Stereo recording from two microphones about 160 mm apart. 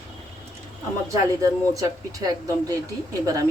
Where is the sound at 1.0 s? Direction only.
20° right (ahead or behind).